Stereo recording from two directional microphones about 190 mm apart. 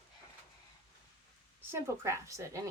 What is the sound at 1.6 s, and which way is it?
Speech, 15° right (ahead or behind).